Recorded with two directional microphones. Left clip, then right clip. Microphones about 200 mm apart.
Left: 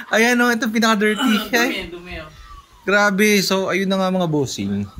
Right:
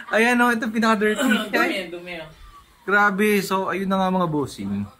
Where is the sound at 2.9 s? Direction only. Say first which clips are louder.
Left 3 dB; 15° left (ahead or behind).